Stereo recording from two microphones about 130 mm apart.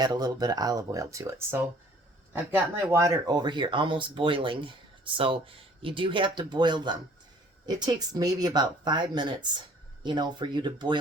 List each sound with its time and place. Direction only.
0.0 s speech: 30° right (ahead or behind)
2.9 s speech: 25° right (ahead or behind)